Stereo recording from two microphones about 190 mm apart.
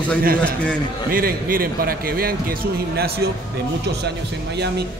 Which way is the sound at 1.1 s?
50° right (ahead or behind).